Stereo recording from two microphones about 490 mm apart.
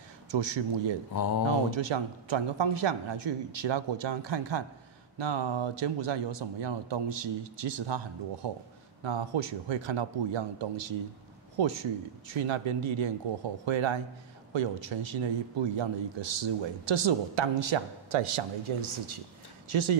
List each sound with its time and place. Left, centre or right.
0.3 s speech: right
1.1 s a sound: left
1.7 s speech: right